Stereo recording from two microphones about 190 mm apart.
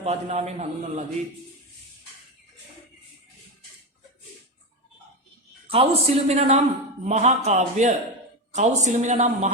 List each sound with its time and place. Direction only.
0.0 s a man's voice: 35° right (ahead or behind)
5.6 s a man's voice: 30° right (ahead or behind)